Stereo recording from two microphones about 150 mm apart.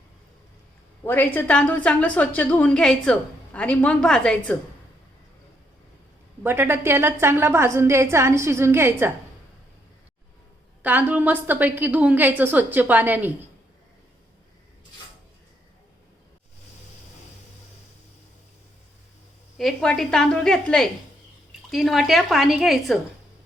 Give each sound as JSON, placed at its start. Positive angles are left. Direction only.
{"t": 1.0, "sound": "a woman's voice", "side_deg": 15}
{"t": 6.4, "sound": "a woman's voice", "side_deg": -15}
{"t": 10.8, "sound": "a woman's voice", "side_deg": -10}
{"t": 19.5, "sound": "a woman's voice", "side_deg": 5}